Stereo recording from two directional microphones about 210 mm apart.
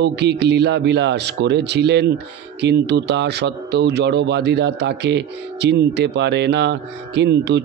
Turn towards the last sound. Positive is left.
turn(degrees=-55)  # may be behind; listen again after turning